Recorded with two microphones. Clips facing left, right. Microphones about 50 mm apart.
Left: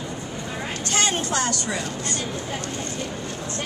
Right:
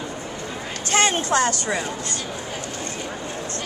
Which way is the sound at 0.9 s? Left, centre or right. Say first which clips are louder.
Right 5 dB; right.